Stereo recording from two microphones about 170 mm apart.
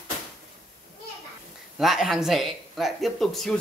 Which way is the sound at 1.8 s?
Centre (ahead or behind).